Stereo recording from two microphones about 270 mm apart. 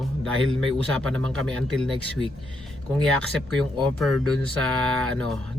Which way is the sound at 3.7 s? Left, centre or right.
Centre.